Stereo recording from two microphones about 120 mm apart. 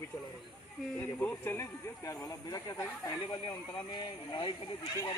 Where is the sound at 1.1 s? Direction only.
15° left (ahead or behind); by 4.5 s 40° left (ahead or behind).